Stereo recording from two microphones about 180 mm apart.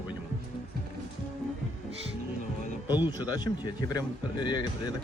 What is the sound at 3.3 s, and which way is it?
Speech, 25° left (ahead or behind).